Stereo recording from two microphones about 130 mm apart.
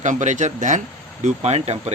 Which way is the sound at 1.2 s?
55° right (ahead or behind).